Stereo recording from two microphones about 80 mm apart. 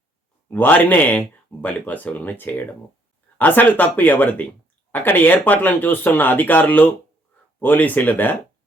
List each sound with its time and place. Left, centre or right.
0.5 s speech: left